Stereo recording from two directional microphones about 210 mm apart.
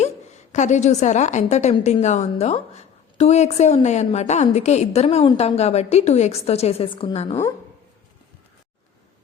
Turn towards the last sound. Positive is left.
turn(degrees=30)  # may be behind; listen again after turning